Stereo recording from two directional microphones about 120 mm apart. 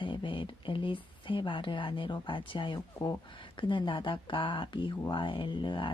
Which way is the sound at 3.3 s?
45° left (ahead or behind).